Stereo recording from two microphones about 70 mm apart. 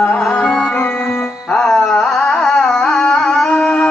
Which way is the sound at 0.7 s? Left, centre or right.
Left.